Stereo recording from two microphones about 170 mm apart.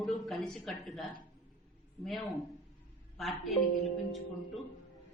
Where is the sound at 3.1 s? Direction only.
Centre (ahead or behind).